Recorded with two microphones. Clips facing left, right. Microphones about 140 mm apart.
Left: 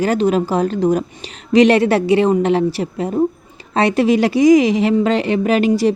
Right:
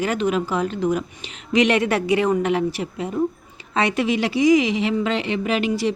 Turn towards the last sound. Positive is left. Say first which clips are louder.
# left 7 dB
turn(degrees=40)  # may be behind; listen again after turning